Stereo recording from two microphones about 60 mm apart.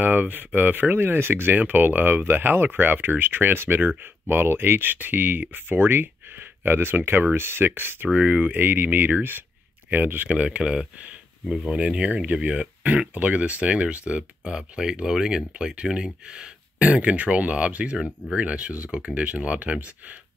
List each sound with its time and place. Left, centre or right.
0.0 s speech: right
8.1 s speech: right
10.3 s speech: centre